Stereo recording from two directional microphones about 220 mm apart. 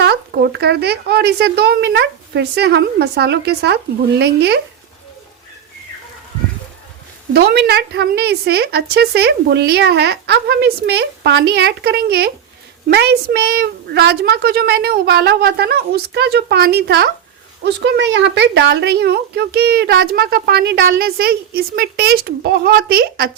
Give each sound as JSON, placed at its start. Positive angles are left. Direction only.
{"t": 0.0, "sound": "a woman's voice", "side_deg": -50}
{"t": 7.3, "sound": "a woman's voice", "side_deg": -45}